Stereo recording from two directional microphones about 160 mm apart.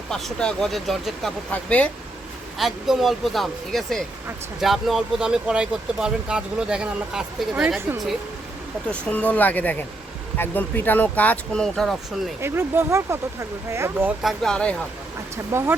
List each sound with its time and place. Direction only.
0.1 s speech: 5° left (ahead or behind)
2.6 s speech: centre (ahead or behind)
8.9 s speech: 10° left (ahead or behind)
12.4 s speech: 15° right (ahead or behind)
14.2 s speech: centre (ahead or behind)
15.5 s speech: 15° right (ahead or behind)